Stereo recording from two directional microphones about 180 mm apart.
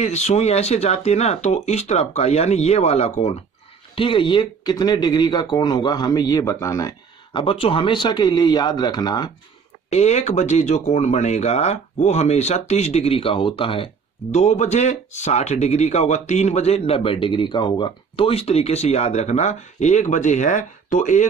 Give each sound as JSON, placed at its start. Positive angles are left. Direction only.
{"t": 0.0, "sound": "speech", "side_deg": 40}
{"t": 9.8, "sound": "speech", "side_deg": 40}